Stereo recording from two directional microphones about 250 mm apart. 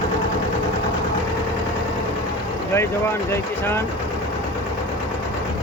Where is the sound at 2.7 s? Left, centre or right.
Centre.